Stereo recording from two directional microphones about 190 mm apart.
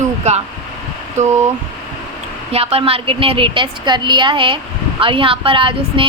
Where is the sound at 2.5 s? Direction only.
30° right (ahead or behind).